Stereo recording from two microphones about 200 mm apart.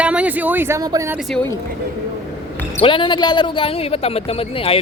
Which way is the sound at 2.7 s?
25° left (ahead or behind).